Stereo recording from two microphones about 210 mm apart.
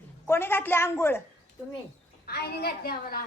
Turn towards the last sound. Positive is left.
turn(degrees=45)  # may be behind; listen again after turning